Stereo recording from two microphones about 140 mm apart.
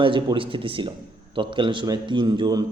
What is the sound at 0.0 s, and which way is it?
A man's voice, 35° right (ahead or behind).